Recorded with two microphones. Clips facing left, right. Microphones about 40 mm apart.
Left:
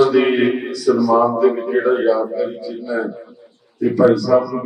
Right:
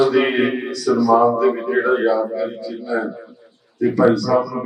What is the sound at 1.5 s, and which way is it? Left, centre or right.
A man's voice, centre.